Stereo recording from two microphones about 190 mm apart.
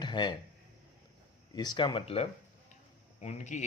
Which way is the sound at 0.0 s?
25° left (ahead or behind).